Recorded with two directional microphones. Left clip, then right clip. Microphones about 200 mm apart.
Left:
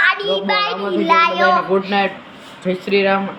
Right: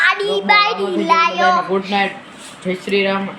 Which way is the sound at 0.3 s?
30° right (ahead or behind).